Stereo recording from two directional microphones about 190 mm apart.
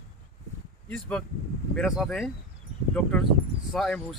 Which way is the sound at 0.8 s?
5° left (ahead or behind).